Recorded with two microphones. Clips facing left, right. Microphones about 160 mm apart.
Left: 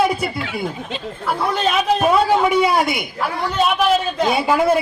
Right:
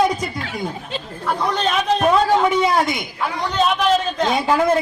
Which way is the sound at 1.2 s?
5° left (ahead or behind).